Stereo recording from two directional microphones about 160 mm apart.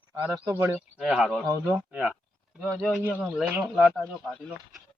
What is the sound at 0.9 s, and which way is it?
Speech, 5° right (ahead or behind).